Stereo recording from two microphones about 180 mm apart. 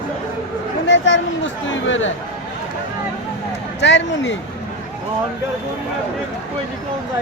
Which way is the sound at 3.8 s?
80° left.